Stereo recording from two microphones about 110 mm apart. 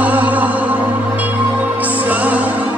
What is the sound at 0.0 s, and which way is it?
Music, 15° right (ahead or behind).